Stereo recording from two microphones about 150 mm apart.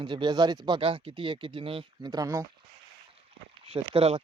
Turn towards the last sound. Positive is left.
turn(degrees=-40)  # may be behind; listen again after turning